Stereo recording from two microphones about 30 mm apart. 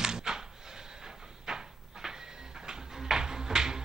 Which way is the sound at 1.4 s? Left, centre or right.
Right.